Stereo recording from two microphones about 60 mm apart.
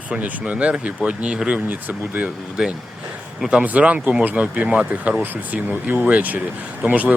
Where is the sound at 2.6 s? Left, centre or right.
Centre.